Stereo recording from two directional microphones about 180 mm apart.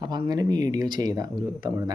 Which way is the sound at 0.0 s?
20° right (ahead or behind).